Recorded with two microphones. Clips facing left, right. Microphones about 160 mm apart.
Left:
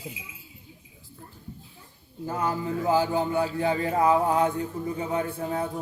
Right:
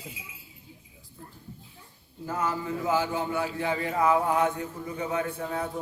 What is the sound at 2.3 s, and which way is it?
A man's voice, 30° left (ahead or behind).